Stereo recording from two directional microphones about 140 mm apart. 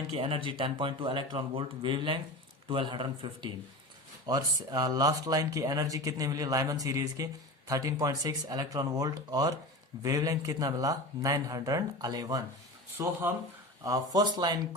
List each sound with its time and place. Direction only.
0.1 s speech: 40° right (ahead or behind)
13.8 s speech: 25° right (ahead or behind)